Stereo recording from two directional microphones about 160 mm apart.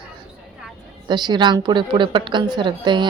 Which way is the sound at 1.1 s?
25° right (ahead or behind).